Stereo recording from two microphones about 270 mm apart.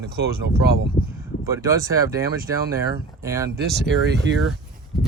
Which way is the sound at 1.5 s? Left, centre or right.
Centre.